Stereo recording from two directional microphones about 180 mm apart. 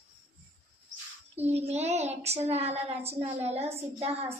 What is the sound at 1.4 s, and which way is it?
A woman's voice, 35° right (ahead or behind).